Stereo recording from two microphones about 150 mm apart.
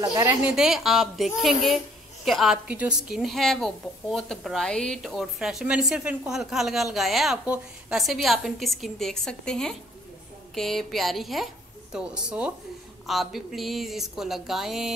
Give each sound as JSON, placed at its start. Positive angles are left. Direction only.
{"t": 0.0, "sound": "a woman's voice", "side_deg": -25}
{"t": 0.5, "sound": "a woman's voice", "side_deg": -5}